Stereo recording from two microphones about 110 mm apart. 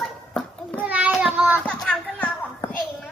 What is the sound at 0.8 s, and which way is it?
Child singing, 15° right (ahead or behind).